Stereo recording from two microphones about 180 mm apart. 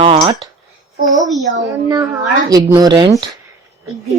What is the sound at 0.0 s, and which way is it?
Speech, 30° right (ahead or behind).